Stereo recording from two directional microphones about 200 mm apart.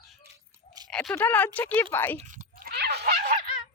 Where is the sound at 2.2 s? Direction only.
40° right (ahead or behind).